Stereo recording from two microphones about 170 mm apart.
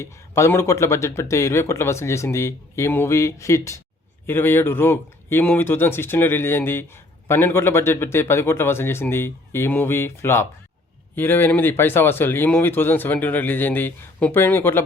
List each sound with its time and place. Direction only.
0.0 s speech: 15° left (ahead or behind)